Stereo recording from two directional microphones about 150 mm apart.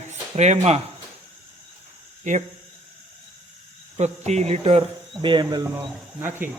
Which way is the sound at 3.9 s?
50° right (ahead or behind).